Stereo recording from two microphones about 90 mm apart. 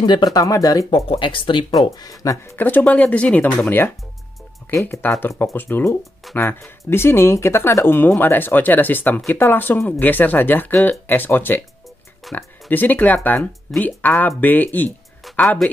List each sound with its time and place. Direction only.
0.0 s speech: 50° left (ahead or behind)
0.8 s speech: 85° left; by 1.7 s 65° left (ahead or behind)
1.9 s speech: 40° left (ahead or behind)
2.4 s speech: 20° left (ahead or behind)
5.0 s speech: 20° left (ahead or behind)
6.2 s speech: centre (ahead or behind)
6.9 s speech: 25° left (ahead or behind)